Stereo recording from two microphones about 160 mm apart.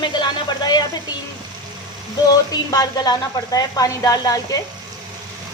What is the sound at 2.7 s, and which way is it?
Speech, 25° left (ahead or behind).